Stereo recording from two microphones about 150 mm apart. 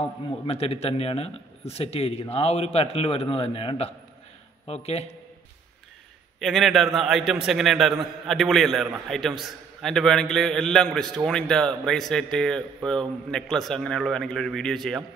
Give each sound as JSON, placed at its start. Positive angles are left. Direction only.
{"t": 0.5, "sound": "a man's voice", "side_deg": 40}
{"t": 6.4, "sound": "a man's voice", "side_deg": 0}